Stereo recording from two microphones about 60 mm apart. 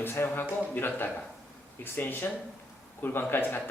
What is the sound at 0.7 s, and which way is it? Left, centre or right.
Speech, left.